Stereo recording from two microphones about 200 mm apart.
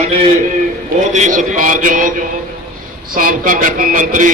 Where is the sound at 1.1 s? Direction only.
35° right (ahead or behind).